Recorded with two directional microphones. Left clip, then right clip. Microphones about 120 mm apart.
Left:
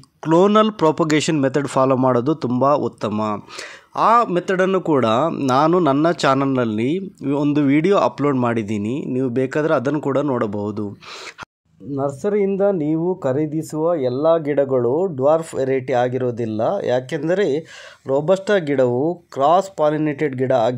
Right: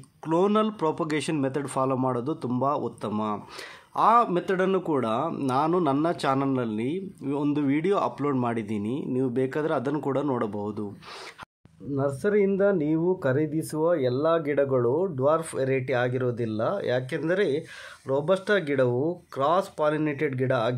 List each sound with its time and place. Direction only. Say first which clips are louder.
0.2 s speech: left 9 dB; 60° left (ahead or behind)
3.1 s speech: left 7 dB; 50° left (ahead or behind); by 5.7 s 90° left
6.0 s speech: left 8 dB; 65° left (ahead or behind)
12.0 s speech: left 4 dB; 30° left (ahead or behind)